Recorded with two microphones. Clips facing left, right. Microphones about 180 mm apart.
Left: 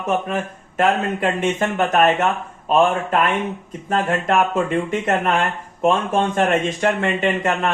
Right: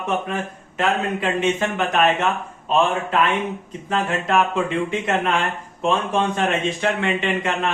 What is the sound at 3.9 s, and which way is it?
Speech, 45° left (ahead or behind).